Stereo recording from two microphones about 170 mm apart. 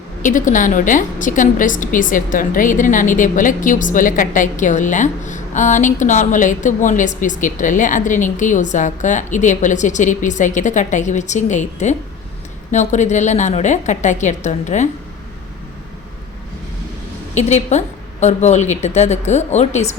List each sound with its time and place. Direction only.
0.2 s a woman's voice: 50° left (ahead or behind)
17.3 s a woman's voice: 45° left (ahead or behind)